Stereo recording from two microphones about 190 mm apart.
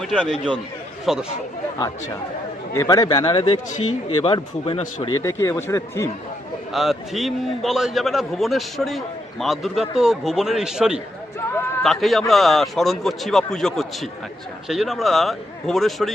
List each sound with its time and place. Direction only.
0.0 s a man's voice: centre (ahead or behind)
2.7 s speech: 20° left (ahead or behind)
5.0 s speech: 15° left (ahead or behind)
6.7 s a man's voice: centre (ahead or behind)